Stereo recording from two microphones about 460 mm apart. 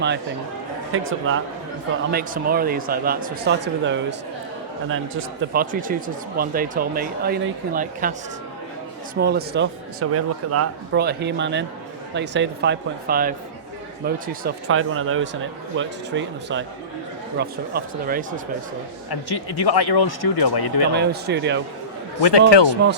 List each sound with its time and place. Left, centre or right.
0.9 s speech: right
9.1 s speech: right
19.1 s speech: left
20.9 s speech: right
22.2 s speech: left
22.7 s speech: right